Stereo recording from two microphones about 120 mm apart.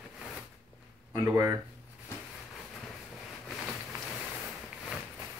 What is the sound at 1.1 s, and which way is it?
Speech, 25° right (ahead or behind).